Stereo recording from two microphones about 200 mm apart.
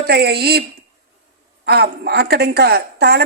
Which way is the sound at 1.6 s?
55° right (ahead or behind).